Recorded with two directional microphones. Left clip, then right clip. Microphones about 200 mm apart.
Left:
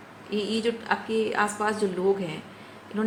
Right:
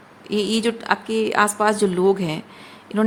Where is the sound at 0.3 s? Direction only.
60° right (ahead or behind).